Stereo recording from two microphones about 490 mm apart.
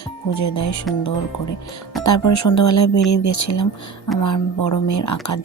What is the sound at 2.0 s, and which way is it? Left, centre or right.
Speech, left.